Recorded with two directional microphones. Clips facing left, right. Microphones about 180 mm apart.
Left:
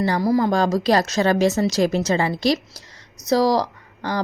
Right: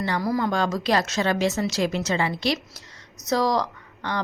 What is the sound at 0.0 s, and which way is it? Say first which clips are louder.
A woman's voice: left 5 dB; 35° left (ahead or behind).